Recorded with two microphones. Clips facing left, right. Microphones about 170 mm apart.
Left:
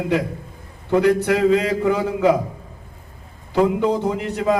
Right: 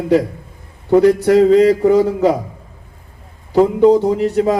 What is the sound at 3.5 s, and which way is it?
A man's voice, 35° right (ahead or behind).